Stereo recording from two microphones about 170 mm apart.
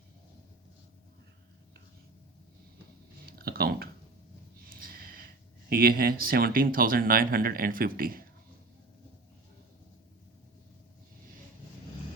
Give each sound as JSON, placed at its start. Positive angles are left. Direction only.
{"t": 3.2, "sound": "speech", "side_deg": -60}